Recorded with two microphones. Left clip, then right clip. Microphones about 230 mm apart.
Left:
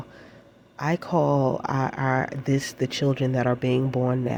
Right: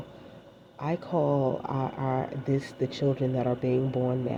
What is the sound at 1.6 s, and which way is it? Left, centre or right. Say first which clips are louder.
Speech: left 5 dB; left.